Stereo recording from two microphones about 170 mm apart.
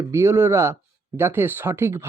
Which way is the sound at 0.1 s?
15° right (ahead or behind).